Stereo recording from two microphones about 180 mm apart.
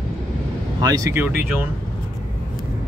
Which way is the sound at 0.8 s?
20° right (ahead or behind).